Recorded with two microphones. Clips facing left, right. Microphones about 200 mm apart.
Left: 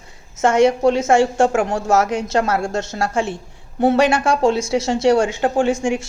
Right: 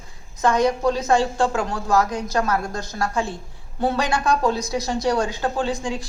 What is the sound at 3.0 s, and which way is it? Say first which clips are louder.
A woman's voice: left 4 dB; 90° left.